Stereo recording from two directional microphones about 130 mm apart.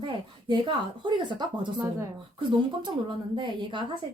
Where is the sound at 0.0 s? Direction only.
35° right (ahead or behind).